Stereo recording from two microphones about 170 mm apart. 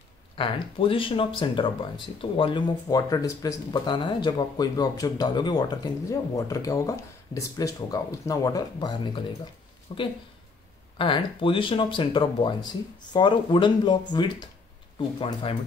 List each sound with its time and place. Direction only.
0.4 s speech: 30° left (ahead or behind)
15.0 s speech: 30° left (ahead or behind)